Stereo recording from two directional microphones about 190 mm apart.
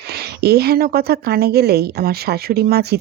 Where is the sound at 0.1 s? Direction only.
55° right (ahead or behind).